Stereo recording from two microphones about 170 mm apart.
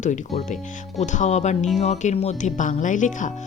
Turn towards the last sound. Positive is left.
turn(degrees=50)  # may be behind; listen again after turning